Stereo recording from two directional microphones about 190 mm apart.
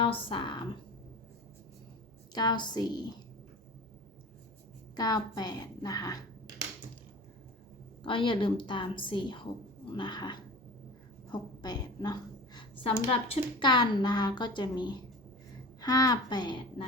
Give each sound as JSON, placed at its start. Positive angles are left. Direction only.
{"t": 0.0, "sound": "a woman's voice", "side_deg": 25}
{"t": 2.3, "sound": "a woman's voice", "side_deg": 20}
{"t": 4.9, "sound": "a woman's voice", "side_deg": 20}
{"t": 8.0, "sound": "a woman's voice", "side_deg": 25}